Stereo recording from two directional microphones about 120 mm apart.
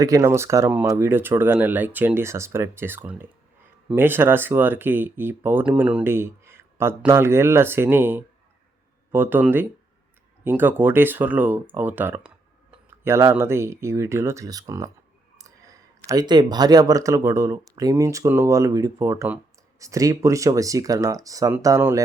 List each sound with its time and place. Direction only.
0.0 s speech: 30° right (ahead or behind)
15.4 s clicking: 25° right (ahead or behind)
16.0 s speech: 35° right (ahead or behind)